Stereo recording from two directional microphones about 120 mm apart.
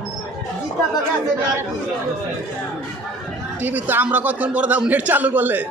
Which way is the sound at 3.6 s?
15° right (ahead or behind).